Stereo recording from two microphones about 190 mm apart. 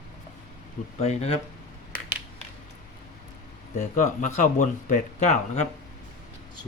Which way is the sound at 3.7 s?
40° left (ahead or behind).